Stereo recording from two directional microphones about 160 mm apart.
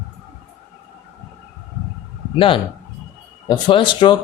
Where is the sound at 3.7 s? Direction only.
30° left (ahead or behind).